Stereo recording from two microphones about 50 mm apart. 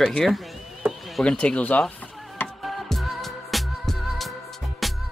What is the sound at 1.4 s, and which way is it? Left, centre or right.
Speech, left.